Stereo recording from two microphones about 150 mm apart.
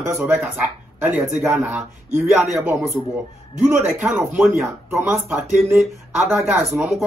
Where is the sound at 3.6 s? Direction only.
10° right (ahead or behind).